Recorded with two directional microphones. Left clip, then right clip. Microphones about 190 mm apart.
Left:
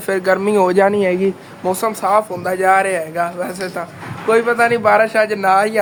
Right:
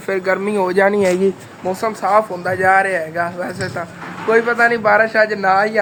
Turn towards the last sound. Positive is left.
turn(degrees=5)  # may be behind; listen again after turning